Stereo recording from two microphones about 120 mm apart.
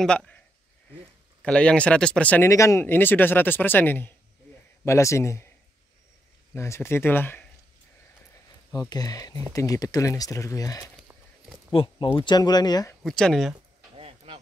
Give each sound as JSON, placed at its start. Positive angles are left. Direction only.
{"t": 0.0, "sound": "speech", "side_deg": 5}
{"t": 1.4, "sound": "speech", "side_deg": 10}
{"t": 2.5, "sound": "speech", "side_deg": 25}
{"t": 6.5, "sound": "speech", "side_deg": 25}
{"t": 8.7, "sound": "speech", "side_deg": 30}
{"t": 11.7, "sound": "speech", "side_deg": 50}
{"t": 13.0, "sound": "speech", "side_deg": 5}
{"t": 13.9, "sound": "a sound", "side_deg": -50}